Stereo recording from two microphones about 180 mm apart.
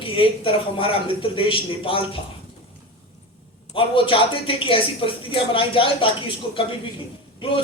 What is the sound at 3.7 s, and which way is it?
Speech, 30° left (ahead or behind).